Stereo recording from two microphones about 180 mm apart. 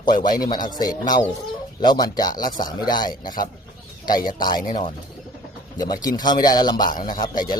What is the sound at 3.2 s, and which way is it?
Speech, 50° left (ahead or behind).